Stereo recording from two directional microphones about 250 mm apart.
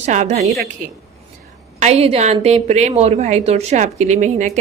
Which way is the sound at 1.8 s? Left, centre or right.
Right.